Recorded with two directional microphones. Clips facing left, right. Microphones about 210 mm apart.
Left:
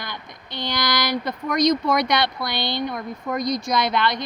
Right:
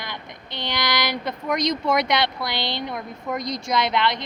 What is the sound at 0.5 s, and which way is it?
Speech, 25° right (ahead or behind).